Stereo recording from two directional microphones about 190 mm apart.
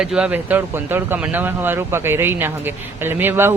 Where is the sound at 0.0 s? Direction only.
5° right (ahead or behind).